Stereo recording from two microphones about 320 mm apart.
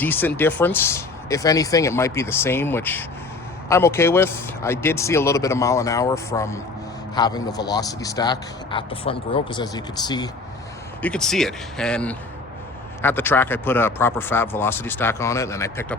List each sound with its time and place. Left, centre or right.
0.0 s speech: centre
11.0 s speech: centre